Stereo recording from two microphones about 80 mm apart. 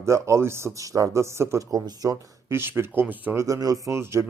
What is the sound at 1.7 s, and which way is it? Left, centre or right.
Speech, right.